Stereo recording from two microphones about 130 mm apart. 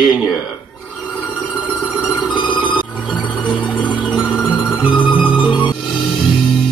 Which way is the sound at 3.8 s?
35° left (ahead or behind).